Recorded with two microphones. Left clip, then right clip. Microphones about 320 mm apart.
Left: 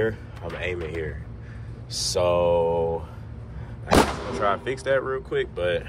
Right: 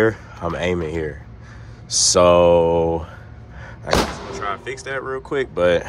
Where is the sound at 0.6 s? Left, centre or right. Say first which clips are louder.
Right 6 dB; centre.